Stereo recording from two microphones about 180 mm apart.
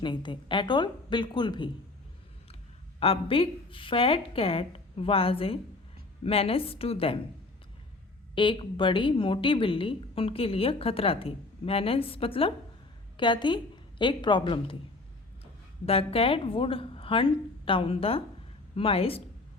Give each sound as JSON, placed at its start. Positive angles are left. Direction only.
{"t": 0.0, "sound": "a woman's voice", "side_deg": 25}
{"t": 3.0, "sound": "a woman's voice", "side_deg": 30}
{"t": 8.4, "sound": "a woman's voice", "side_deg": 30}
{"t": 15.9, "sound": "a woman's voice", "side_deg": 30}